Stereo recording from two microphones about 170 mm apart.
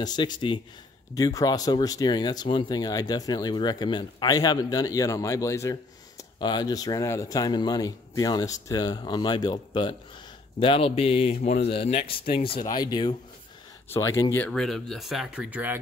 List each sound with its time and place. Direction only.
0.0 s a man's voice: 25° left (ahead or behind)
14.5 s speech: centre (ahead or behind)